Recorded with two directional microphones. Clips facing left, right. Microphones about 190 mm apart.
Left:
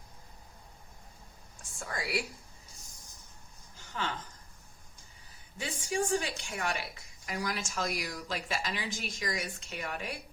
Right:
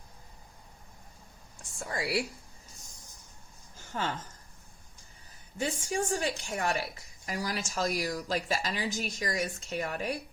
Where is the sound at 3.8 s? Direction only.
45° right (ahead or behind).